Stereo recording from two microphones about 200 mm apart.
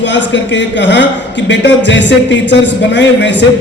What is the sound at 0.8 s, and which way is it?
A man's voice, 65° left (ahead or behind).